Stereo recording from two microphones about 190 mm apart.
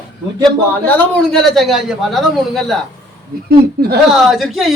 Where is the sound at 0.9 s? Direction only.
5° left (ahead or behind).